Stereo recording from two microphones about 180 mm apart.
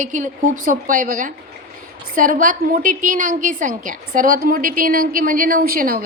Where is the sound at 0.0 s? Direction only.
45° right (ahead or behind).